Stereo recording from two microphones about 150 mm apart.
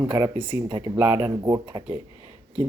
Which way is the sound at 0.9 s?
15° right (ahead or behind).